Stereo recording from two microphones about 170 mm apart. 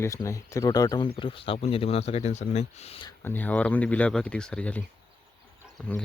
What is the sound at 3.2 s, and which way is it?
Speech, 10° left (ahead or behind).